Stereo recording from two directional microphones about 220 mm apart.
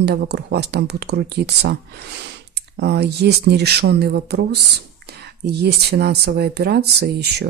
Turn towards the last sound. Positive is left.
turn(degrees=-45)  # may be behind; listen again after turning